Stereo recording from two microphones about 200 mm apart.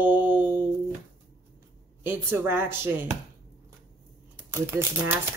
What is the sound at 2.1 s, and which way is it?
Speech, 10° right (ahead or behind).